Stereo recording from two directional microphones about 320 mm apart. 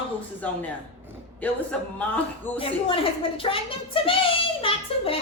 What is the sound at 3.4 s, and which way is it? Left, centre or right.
Child singing, centre.